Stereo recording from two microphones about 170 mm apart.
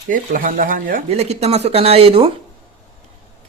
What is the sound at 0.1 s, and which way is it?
Speech, 55° right (ahead or behind).